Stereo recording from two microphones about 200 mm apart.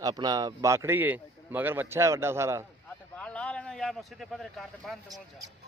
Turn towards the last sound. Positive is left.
turn(degrees=0)  # may be behind; listen again after turning